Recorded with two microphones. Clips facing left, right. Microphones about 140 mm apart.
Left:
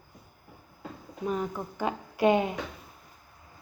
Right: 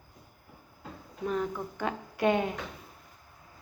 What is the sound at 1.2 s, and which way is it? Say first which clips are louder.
Speech: even; 10° left (ahead or behind).